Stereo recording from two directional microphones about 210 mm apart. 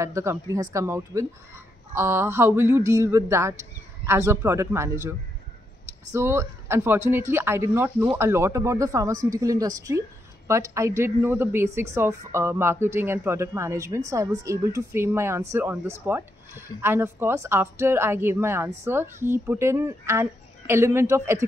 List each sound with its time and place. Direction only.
0.0 s speech: 15° right (ahead or behind)
6.1 s speech: 10° right (ahead or behind)